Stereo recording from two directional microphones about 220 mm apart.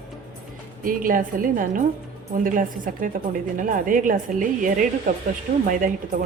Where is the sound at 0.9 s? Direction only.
40° right (ahead or behind).